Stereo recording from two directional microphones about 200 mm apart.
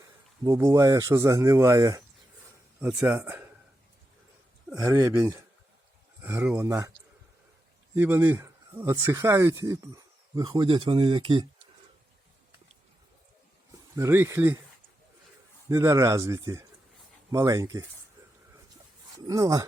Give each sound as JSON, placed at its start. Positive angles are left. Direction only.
{"t": 0.0, "sound": "speech", "side_deg": -20}
{"t": 2.8, "sound": "speech", "side_deg": -5}
{"t": 4.7, "sound": "speech", "side_deg": -15}
{"t": 7.9, "sound": "speech", "side_deg": -10}
{"t": 13.9, "sound": "speech", "side_deg": -15}
{"t": 15.7, "sound": "speech", "side_deg": -15}
{"t": 19.1, "sound": "speech", "side_deg": -20}